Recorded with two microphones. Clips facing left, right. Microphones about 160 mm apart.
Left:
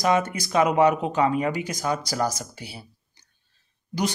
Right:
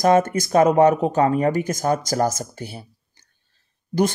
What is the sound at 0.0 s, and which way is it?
Speech, 50° right (ahead or behind).